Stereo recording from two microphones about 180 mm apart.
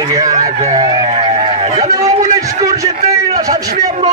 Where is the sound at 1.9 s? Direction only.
20° right (ahead or behind).